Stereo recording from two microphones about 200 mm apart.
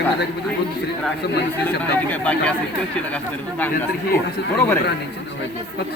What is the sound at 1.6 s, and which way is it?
Speech, 10° left (ahead or behind).